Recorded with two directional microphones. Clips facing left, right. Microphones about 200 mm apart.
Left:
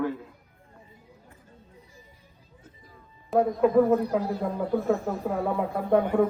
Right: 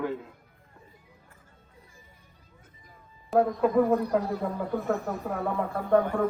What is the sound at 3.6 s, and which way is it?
Speech, centre (ahead or behind).